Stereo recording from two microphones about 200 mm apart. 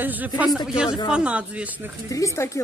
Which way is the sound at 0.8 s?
25° left (ahead or behind).